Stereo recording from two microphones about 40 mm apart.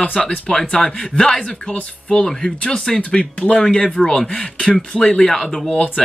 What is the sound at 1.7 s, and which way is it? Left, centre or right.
Speech, left.